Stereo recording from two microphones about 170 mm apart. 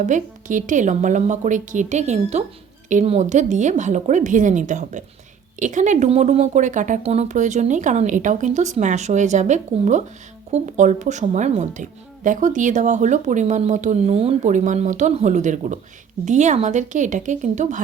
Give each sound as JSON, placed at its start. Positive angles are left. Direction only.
{"t": 0.0, "sound": "a woman's voice", "side_deg": -50}